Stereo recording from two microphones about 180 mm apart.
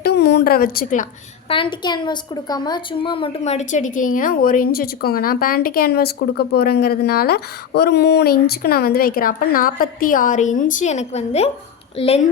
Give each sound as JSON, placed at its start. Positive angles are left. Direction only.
{"t": 0.0, "sound": "a woman's voice", "side_deg": 65}
{"t": 1.5, "sound": "a woman's voice", "side_deg": 25}